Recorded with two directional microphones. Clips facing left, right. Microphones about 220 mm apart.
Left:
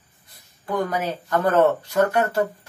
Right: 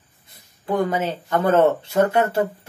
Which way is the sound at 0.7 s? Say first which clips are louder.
Right 3 dB; 25° right (ahead or behind).